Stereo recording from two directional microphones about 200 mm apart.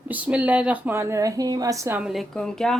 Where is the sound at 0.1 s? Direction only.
5° right (ahead or behind).